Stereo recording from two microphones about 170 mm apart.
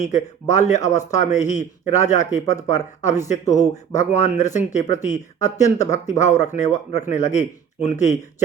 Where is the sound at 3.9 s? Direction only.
45° left (ahead or behind).